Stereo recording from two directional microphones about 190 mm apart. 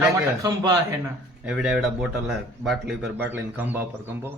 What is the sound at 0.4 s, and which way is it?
Speech, 20° right (ahead or behind).